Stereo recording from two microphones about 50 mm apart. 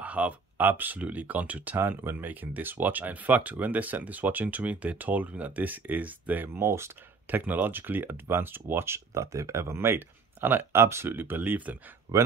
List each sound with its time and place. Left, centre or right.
0.0 s a sound: right
0.7 s speech: right
1.8 s speech: right
6.5 s speech: right
7.2 s speech: right
9.1 s speech: right
9.9 s speech: right
11.1 s speech: right